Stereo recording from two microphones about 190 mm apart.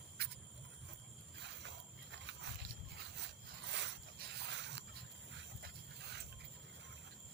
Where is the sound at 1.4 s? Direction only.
65° right (ahead or behind).